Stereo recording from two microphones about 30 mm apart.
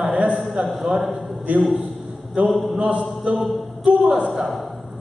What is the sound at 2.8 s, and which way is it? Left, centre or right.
Speech, right.